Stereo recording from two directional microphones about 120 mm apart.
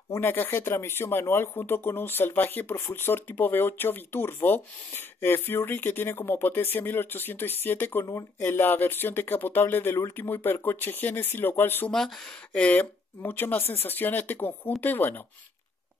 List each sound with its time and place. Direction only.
0.1 s speech: 15° left (ahead or behind)